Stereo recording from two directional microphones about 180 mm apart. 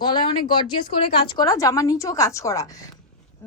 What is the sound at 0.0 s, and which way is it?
Speech, 25° left (ahead or behind).